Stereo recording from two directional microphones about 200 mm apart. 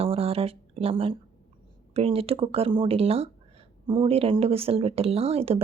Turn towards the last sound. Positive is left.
turn(degrees=-30)  # may be behind; listen again after turning